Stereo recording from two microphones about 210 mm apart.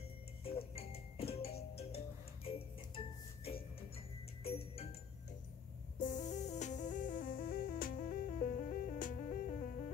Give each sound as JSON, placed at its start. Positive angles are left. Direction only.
{"t": 0.4, "sound": "music", "side_deg": 25}
{"t": 4.4, "sound": "music", "side_deg": 30}
{"t": 5.9, "sound": "music", "side_deg": 35}